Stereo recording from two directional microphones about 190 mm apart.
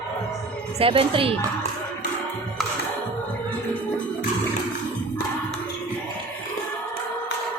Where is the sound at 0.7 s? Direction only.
30° right (ahead or behind).